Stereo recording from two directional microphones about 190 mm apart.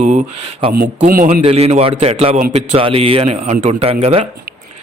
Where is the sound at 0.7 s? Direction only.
45° right (ahead or behind).